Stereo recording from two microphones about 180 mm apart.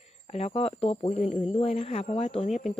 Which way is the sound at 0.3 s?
35° left (ahead or behind).